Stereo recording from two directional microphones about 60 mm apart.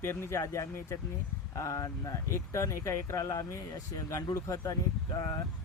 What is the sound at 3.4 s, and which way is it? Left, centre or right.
Speech, left.